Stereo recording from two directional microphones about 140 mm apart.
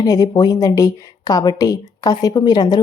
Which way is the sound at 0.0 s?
25° left (ahead or behind).